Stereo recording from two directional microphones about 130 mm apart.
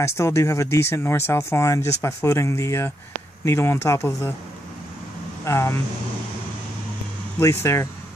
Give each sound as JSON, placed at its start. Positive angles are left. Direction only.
{"t": 0.0, "sound": "speech", "side_deg": 20}
{"t": 5.4, "sound": "speech", "side_deg": 20}
{"t": 7.3, "sound": "speech", "side_deg": 20}